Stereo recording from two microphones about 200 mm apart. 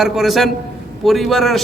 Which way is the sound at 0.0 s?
Centre (ahead or behind).